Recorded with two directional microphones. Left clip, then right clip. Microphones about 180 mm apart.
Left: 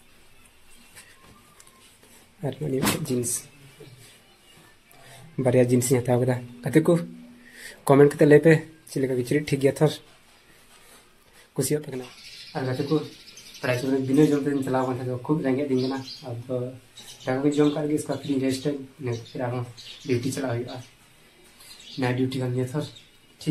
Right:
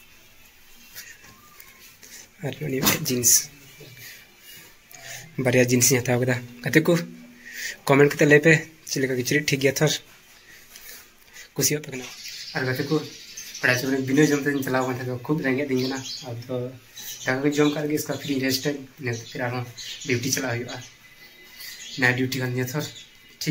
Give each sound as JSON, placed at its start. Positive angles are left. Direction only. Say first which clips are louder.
{"t": 2.4, "sound": "speech", "louder": "right 1 dB", "side_deg": 15}
{"t": 5.4, "sound": "speech", "louder": "right 1 dB", "side_deg": 10}
{"t": 11.6, "sound": "speech", "louder": "right 2 dB", "side_deg": 20}
{"t": 12.5, "sound": "speech", "louder": "right 1 dB", "side_deg": 0}
{"t": 22.0, "sound": "speech", "louder": "right 4 dB", "side_deg": 0}